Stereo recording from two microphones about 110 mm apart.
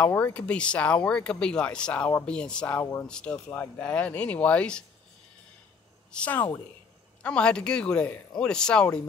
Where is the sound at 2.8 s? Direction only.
25° left (ahead or behind).